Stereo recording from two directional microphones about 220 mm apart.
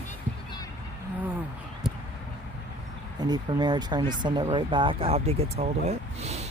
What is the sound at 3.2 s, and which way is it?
Speech, 20° right (ahead or behind).